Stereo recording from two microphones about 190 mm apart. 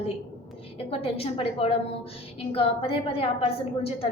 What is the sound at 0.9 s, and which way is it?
A woman's voice, 30° left (ahead or behind).